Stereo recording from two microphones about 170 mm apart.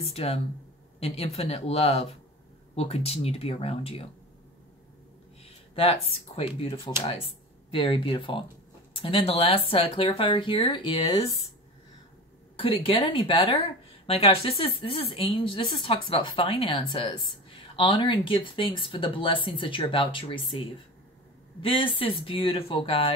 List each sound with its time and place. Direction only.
0.0 s speech: 35° left (ahead or behind)
5.4 s speech: 35° left (ahead or behind)
12.5 s speech: 30° left (ahead or behind)
21.5 s speech: 30° left (ahead or behind)